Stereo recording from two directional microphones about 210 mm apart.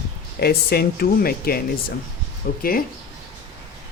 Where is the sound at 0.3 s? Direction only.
50° left (ahead or behind).